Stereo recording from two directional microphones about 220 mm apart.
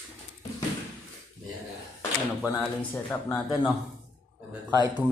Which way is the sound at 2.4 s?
10° left (ahead or behind).